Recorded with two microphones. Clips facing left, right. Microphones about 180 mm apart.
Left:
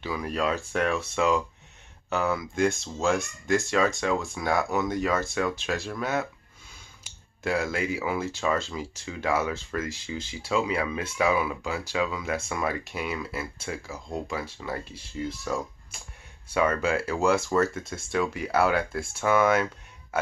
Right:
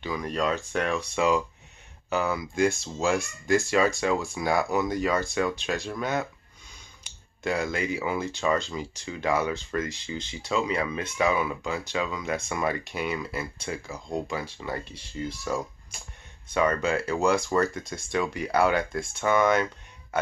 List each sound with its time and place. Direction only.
0.0 s speech: 5° left (ahead or behind)